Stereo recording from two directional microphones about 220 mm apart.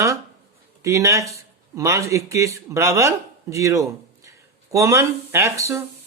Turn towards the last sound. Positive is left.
turn(degrees=-10)  # may be behind; listen again after turning